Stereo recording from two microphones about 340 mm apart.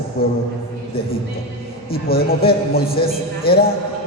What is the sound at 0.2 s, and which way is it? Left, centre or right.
Speech, left.